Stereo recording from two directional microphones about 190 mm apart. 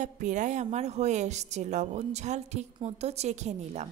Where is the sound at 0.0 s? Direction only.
40° right (ahead or behind).